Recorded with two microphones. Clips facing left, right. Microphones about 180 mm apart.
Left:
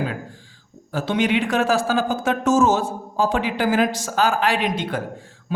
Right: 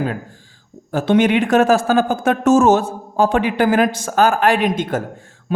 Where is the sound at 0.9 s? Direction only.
50° right (ahead or behind).